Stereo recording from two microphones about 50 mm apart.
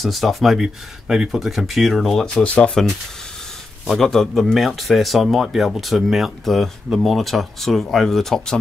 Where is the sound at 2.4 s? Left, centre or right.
Left.